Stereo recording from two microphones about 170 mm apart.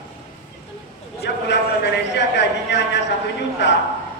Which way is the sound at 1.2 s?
85° left.